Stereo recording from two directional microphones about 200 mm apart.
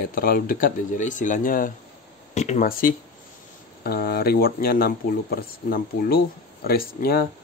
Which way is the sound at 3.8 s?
50° left (ahead or behind).